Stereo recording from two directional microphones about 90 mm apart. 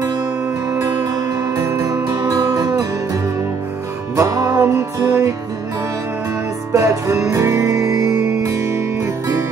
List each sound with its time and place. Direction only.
1.6 s music: 35° right (ahead or behind)
4.2 s music: 35° right (ahead or behind)
6.7 s music: 35° right (ahead or behind)